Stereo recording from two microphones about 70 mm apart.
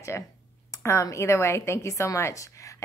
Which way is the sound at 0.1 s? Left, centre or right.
Left.